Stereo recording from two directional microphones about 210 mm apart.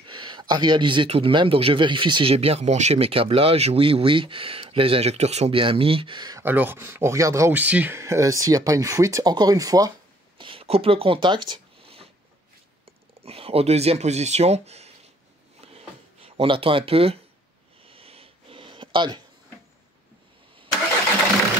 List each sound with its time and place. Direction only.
0.0 s speech: 20° right (ahead or behind)
13.2 s speech: 30° right (ahead or behind)
15.6 s a sound: 30° right (ahead or behind)